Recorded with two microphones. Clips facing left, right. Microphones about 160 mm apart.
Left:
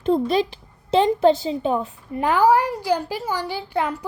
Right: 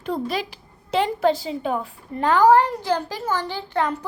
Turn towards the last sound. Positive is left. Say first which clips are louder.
# even
turn(degrees=10)  # may be behind; listen again after turning